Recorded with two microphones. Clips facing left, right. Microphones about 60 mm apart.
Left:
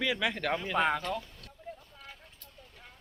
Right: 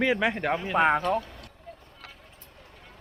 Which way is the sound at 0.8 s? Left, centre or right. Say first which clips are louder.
Right 7 dB; right.